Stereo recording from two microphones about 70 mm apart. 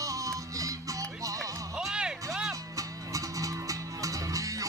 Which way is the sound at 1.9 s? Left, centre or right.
Centre.